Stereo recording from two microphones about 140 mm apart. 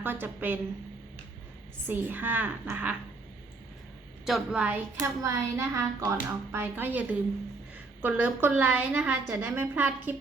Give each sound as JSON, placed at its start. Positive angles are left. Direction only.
{"t": 0.0, "sound": "a woman's voice", "side_deg": -15}
{"t": 1.9, "sound": "a woman's voice", "side_deg": -15}
{"t": 4.3, "sound": "a woman's voice", "side_deg": -5}
{"t": 5.2, "sound": "a woman's voice", "side_deg": -20}